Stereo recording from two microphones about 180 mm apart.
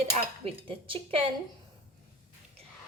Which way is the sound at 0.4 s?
30° right (ahead or behind).